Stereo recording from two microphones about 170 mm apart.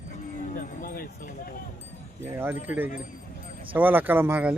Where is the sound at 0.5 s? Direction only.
55° left (ahead or behind).